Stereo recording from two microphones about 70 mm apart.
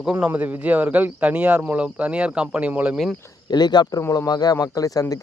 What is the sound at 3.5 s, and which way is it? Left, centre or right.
Speech, left.